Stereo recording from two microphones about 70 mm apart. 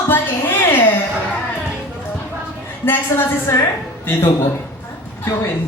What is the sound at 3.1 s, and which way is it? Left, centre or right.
Speech, left.